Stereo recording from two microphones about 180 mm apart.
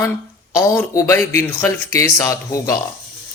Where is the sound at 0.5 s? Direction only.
15° left (ahead or behind).